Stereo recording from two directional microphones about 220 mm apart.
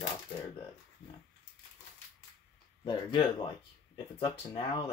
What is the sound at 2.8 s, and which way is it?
Speech, 20° left (ahead or behind).